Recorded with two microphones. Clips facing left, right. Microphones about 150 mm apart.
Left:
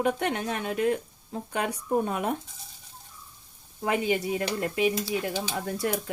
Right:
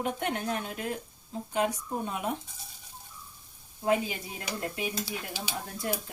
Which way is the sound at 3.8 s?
80° left.